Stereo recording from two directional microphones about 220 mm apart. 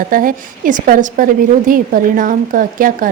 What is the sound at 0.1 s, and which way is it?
A woman's voice, 40° right (ahead or behind).